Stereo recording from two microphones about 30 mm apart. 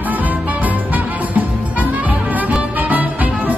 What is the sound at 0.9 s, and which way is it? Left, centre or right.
Music, right.